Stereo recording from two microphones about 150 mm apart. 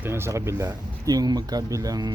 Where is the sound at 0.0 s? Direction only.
15° right (ahead or behind).